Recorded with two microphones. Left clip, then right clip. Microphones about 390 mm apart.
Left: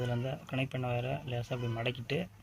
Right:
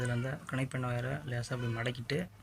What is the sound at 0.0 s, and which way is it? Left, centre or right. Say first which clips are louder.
Speech: left 1 dB; centre.